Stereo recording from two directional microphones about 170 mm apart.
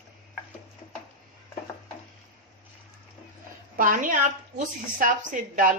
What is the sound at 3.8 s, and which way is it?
A woman's voice, 50° right (ahead or behind).